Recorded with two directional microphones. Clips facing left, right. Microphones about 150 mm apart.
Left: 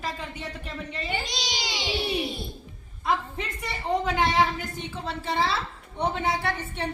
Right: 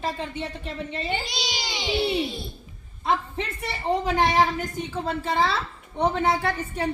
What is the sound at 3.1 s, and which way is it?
A woman's voice, 30° right (ahead or behind).